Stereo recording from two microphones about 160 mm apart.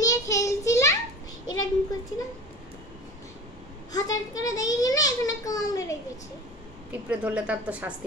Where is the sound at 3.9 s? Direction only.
20° left (ahead or behind).